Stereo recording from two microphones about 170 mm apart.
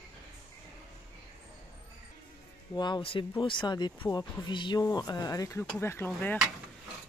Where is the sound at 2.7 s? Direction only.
25° left (ahead or behind).